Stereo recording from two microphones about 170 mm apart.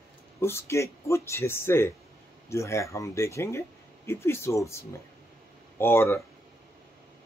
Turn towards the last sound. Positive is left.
turn(degrees=15)  # may be behind; listen again after turning